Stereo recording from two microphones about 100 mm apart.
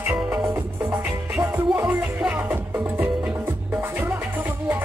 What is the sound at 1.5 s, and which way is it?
Music, 25° right (ahead or behind).